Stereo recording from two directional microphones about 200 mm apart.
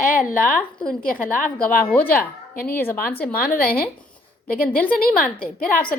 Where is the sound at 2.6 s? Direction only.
10° left (ahead or behind).